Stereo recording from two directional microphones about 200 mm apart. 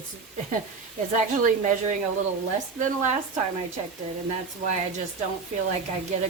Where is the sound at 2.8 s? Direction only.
35° right (ahead or behind).